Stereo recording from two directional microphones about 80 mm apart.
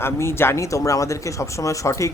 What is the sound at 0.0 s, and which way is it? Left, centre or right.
Speech, left.